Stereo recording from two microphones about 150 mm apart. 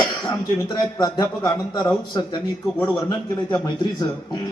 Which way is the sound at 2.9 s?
25° left (ahead or behind).